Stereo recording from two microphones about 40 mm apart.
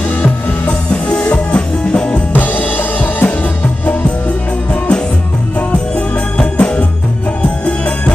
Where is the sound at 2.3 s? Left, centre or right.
Left.